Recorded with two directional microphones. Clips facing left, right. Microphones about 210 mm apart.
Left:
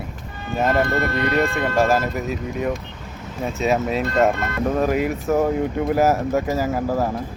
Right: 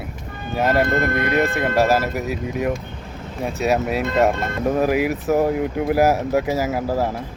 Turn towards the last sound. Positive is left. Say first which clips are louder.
# even
turn(degrees=-5)  # may be behind; listen again after turning